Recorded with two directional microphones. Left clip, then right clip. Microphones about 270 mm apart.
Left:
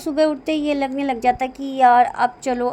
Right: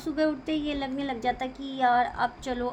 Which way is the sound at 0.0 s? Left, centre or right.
Left.